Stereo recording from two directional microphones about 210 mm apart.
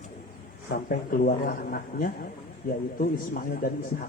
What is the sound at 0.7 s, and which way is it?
Speech, 45° left (ahead or behind).